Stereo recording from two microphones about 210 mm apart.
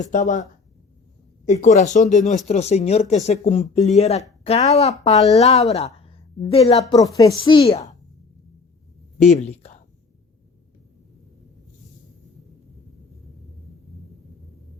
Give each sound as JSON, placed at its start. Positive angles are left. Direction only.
{"t": 0.0, "sound": "speech", "side_deg": 35}
{"t": 1.6, "sound": "speech", "side_deg": 35}
{"t": 7.2, "sound": "a woman's voice", "side_deg": 15}
{"t": 7.6, "sound": "a woman's voice", "side_deg": 30}
{"t": 9.2, "sound": "speech", "side_deg": 30}